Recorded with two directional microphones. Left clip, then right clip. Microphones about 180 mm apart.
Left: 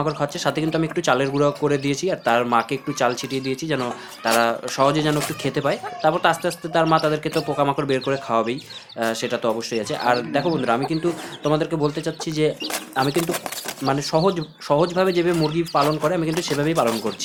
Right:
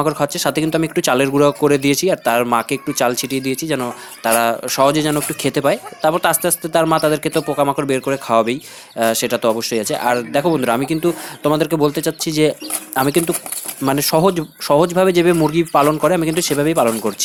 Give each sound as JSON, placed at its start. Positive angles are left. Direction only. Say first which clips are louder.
{"t": 0.0, "sound": "speech", "louder": "right 5 dB", "side_deg": -40}